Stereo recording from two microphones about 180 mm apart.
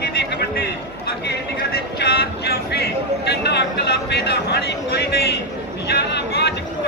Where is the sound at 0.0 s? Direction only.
65° left (ahead or behind).